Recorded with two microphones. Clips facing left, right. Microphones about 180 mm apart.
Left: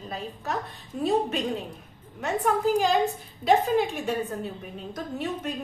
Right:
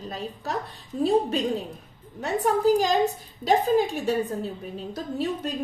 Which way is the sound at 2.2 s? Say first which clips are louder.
Right 2 dB; 35° right (ahead or behind).